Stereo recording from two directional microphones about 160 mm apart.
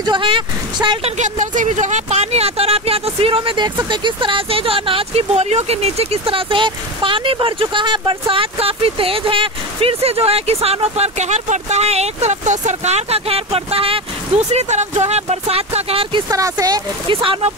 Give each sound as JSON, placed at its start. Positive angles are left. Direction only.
{"t": 0.0, "sound": "speech", "side_deg": -30}
{"t": 1.1, "sound": "speech", "side_deg": -50}
{"t": 17.1, "sound": "speech", "side_deg": -35}